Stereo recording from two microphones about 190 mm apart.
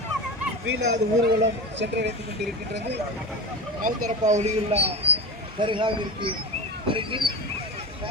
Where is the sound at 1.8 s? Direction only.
65° right (ahead or behind).